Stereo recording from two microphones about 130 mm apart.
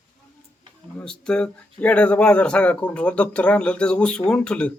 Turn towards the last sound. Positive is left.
turn(degrees=10)  # may be behind; listen again after turning